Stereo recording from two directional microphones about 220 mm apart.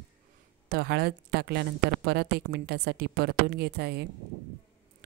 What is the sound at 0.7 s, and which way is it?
Speech, 45° right (ahead or behind).